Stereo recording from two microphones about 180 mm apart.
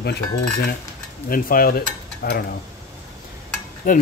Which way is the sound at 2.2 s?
60° left (ahead or behind).